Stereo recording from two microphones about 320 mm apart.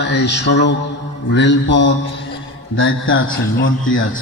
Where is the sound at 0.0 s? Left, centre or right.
Left.